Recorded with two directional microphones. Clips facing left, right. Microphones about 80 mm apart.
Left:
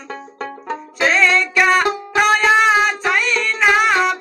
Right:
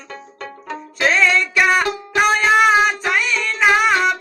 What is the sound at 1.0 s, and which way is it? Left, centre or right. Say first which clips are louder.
Music: left 1 dB; centre.